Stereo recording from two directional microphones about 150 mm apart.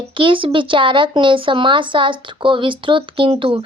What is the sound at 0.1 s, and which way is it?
Speech, 35° right (ahead or behind).